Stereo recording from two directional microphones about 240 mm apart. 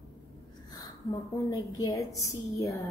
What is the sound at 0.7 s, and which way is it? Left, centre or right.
A woman's voice, centre.